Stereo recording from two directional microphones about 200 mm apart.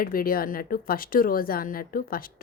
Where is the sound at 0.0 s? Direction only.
45° left (ahead or behind).